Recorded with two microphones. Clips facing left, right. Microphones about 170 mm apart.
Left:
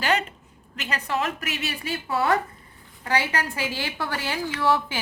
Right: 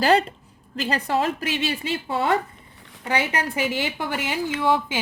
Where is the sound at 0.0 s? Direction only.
35° right (ahead or behind).